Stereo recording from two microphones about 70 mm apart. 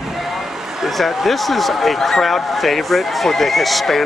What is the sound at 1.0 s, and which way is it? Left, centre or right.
Speech, centre.